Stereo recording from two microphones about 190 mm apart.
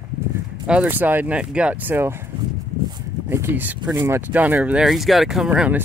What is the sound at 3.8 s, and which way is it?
Speech, 20° right (ahead or behind).